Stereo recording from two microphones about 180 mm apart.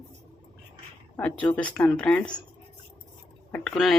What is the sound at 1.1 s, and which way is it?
Speech, 5° left (ahead or behind).